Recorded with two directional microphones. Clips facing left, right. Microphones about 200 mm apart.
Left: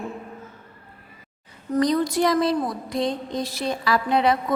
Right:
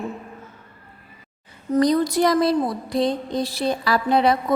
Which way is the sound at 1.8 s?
35° right (ahead or behind).